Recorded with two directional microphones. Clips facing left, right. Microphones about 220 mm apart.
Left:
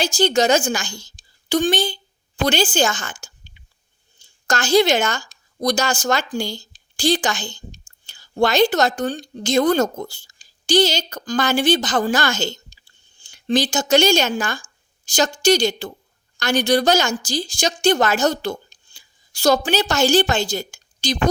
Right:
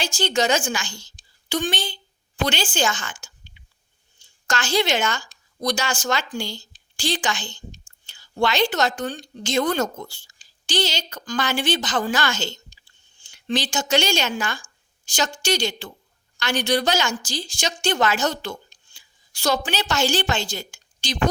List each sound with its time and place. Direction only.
0.0 s a woman's voice: 40° left (ahead or behind)